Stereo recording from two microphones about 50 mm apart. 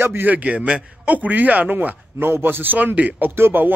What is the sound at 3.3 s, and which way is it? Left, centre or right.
Speech, right.